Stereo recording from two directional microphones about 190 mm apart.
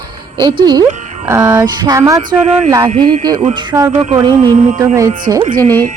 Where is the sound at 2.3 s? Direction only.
35° right (ahead or behind).